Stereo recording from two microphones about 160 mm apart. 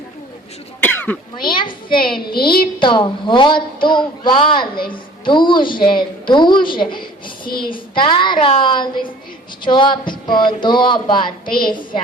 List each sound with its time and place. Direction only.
0.8 s speech: 10° left (ahead or behind)
1.4 s a woman's voice: 30° left (ahead or behind)
2.3 s a woman's voice: 70° left (ahead or behind)
2.7 s a woman's voice: 30° left (ahead or behind)
11.4 s a woman's voice: 65° left (ahead or behind)